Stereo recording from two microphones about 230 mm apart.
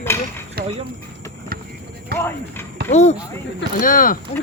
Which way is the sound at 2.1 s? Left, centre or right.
Centre.